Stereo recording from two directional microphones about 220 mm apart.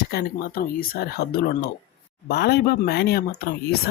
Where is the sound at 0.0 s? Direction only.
45° left (ahead or behind).